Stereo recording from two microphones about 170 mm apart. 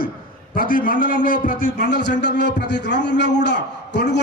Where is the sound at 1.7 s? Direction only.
80° left.